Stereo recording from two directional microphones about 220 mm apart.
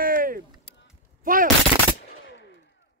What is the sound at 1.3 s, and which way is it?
Gunshot, 40° right (ahead or behind).